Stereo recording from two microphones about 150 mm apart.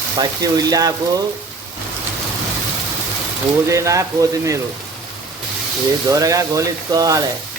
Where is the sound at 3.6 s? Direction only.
20° right (ahead or behind).